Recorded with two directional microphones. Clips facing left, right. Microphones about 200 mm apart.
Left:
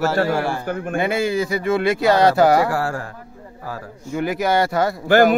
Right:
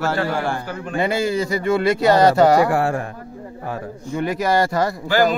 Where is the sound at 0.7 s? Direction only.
50° left (ahead or behind).